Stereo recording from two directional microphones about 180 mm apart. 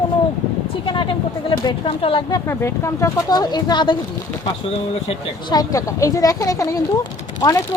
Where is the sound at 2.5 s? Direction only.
15° left (ahead or behind); by 5.6 s 35° left (ahead or behind).